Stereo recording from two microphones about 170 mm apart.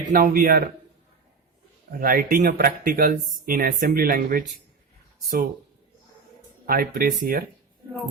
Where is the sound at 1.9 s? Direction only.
55° right (ahead or behind).